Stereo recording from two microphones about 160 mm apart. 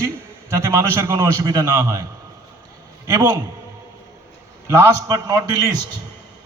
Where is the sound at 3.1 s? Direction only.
20° right (ahead or behind).